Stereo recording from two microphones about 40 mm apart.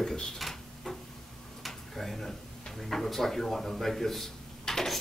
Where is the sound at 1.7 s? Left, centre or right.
Centre.